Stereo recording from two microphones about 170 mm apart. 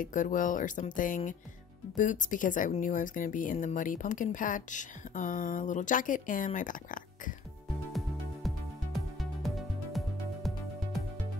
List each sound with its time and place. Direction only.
0.0 s speech: 50° left (ahead or behind)
8.5 s music: centre (ahead or behind)